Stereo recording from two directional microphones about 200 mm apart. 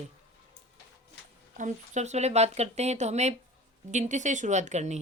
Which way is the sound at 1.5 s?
35° right (ahead or behind).